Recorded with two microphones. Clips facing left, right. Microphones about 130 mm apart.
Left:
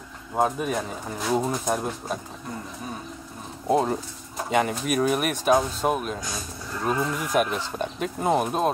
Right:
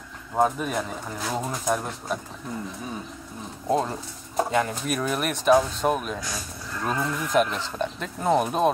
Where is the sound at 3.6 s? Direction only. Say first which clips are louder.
Left 2 dB; 15° left (ahead or behind).